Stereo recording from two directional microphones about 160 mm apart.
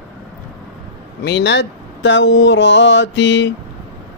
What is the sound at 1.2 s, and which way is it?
Speech, 90° left.